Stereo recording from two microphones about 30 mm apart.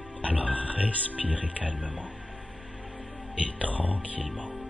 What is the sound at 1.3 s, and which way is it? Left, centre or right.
Speech, right.